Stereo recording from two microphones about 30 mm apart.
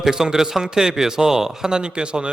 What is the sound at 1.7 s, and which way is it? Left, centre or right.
Speech, right.